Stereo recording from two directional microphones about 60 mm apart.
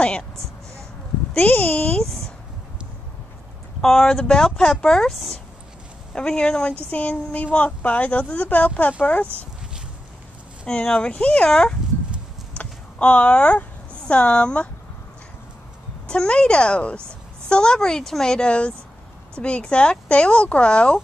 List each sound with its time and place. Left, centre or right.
0.0 s speech: centre
1.3 s speech: left
2.0 s a sound: centre
3.8 s speech: centre
6.1 s speech: centre
6.9 s speech: left
10.7 s speech: centre
16.1 s speech: centre